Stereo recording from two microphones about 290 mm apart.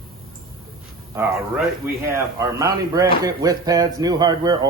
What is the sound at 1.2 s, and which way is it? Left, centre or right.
Speech, centre.